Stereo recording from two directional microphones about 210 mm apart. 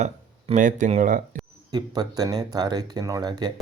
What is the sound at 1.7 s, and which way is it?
Speech, 20° right (ahead or behind).